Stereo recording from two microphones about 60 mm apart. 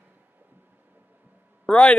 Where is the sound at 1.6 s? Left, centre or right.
Centre.